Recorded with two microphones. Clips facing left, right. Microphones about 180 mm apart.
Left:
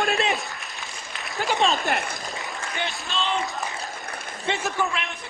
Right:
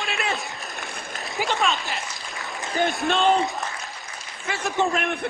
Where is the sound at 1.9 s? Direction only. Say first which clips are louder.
Left 6 dB; 60° left (ahead or behind).